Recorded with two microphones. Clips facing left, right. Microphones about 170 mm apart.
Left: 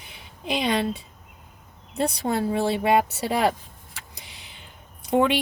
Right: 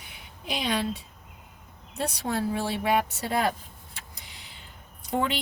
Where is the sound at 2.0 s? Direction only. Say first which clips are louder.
Left 4 dB; 65° left (ahead or behind); by 4.2 s 85° left.